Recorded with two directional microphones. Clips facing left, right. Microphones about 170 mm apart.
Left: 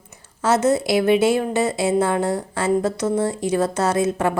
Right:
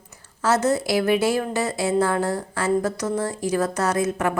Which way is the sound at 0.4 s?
25° left (ahead or behind).